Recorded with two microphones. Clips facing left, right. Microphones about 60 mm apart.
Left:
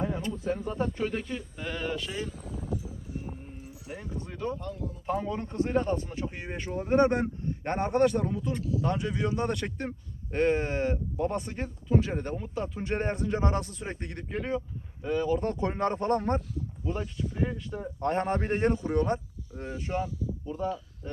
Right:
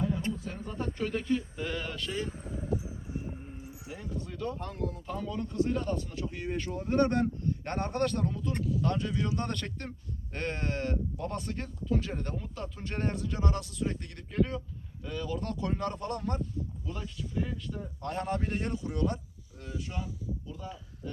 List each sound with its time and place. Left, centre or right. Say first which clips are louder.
0.5 s speech: left 6 dB; centre
2.2 s a sound: even; right
3.8 s speech: left 3 dB; left
4.1 s a sound: left 2 dB; centre
4.5 s speech: right 1 dB; right
5.0 s speech: left 5 dB; left